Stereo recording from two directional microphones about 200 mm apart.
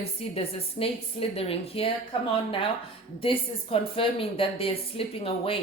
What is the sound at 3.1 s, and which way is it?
A woman's voice, 25° left (ahead or behind).